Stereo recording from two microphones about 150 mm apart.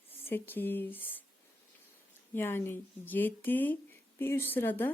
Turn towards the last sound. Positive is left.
turn(degrees=15)  # may be behind; listen again after turning